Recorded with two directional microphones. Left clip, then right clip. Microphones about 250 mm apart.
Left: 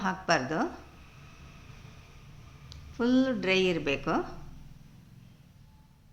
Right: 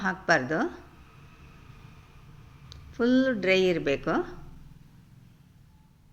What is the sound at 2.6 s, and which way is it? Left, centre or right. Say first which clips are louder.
Speech: right 3 dB; centre.